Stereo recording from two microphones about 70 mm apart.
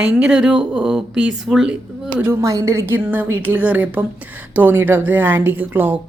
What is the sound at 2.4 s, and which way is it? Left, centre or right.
Speech, right.